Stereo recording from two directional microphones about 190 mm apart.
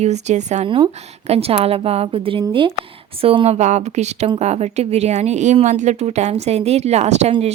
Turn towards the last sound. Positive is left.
turn(degrees=-35)  # may be behind; listen again after turning